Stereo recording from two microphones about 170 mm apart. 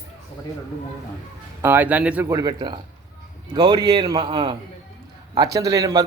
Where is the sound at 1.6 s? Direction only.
10° right (ahead or behind).